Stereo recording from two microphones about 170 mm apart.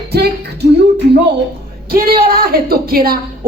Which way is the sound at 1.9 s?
60° right (ahead or behind).